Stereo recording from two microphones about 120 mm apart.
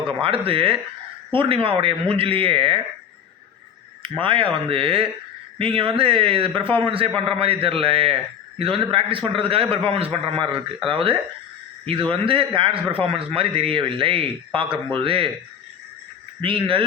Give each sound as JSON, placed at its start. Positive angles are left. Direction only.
{"t": 0.0, "sound": "a man's voice", "side_deg": -50}
{"t": 4.1, "sound": "a man's voice", "side_deg": -45}
{"t": 16.4, "sound": "a man's voice", "side_deg": -45}